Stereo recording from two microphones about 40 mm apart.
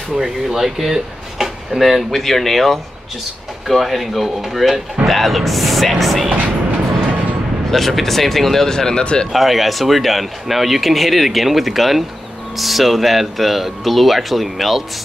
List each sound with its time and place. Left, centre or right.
0.1 s speech: centre
7.7 s speech: centre; by 9.3 s left
9.3 s speech: centre